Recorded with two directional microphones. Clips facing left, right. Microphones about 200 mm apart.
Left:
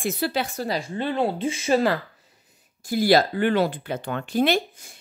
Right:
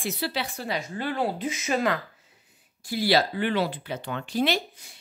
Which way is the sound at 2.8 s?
45° left (ahead or behind).